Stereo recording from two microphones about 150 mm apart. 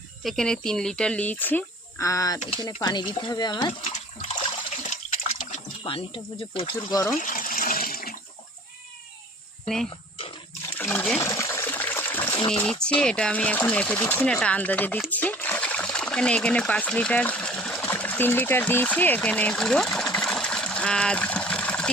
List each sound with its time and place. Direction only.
0.2 s speech: centre (ahead or behind); by 3.7 s 30° left (ahead or behind)
5.1 s water: 50° left (ahead or behind)
5.8 s speech: 35° left (ahead or behind)
7.2 s water: 65° left (ahead or behind)
10.8 s speech: 10° left (ahead or behind)
11.2 s water: 20° left (ahead or behind)
12.5 s speech: 5° left (ahead or behind)
15.1 s splash: 10° left (ahead or behind)